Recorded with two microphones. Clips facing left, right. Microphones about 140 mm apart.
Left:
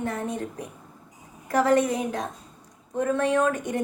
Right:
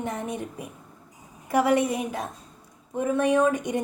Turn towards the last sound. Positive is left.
turn(degrees=-15)  # may be behind; listen again after turning